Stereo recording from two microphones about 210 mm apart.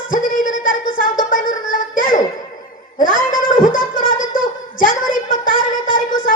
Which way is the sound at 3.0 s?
40° left (ahead or behind).